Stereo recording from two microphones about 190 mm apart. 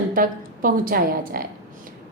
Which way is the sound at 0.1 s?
45° right (ahead or behind).